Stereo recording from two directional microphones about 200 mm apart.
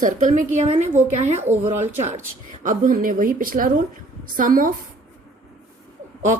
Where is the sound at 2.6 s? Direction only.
40° right (ahead or behind).